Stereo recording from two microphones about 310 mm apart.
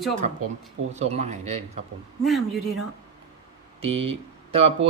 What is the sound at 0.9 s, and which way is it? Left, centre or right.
Speech, right.